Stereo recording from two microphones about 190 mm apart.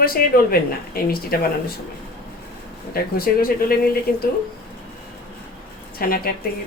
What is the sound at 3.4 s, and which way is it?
Speech, 50° left (ahead or behind).